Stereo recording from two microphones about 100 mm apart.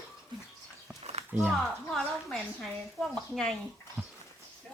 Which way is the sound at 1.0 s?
90° right.